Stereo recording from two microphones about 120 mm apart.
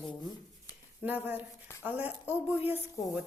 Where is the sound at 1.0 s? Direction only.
15° right (ahead or behind).